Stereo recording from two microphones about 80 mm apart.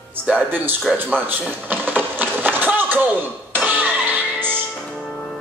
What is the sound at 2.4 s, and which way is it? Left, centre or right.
Run, right.